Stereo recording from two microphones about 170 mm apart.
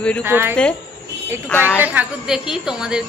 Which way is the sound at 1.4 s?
15° left (ahead or behind).